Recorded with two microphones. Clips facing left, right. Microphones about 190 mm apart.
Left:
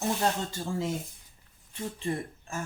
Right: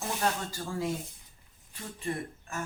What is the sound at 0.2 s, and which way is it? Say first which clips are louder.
Speech: left 2 dB; 25° left (ahead or behind).